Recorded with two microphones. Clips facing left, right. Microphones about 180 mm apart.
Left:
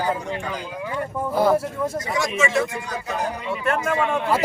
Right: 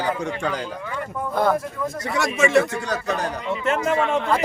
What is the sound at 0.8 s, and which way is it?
Speech, 15° left (ahead or behind).